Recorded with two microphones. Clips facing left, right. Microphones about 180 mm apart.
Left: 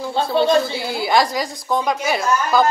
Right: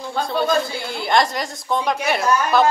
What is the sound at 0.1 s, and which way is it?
Speech, 25° left (ahead or behind).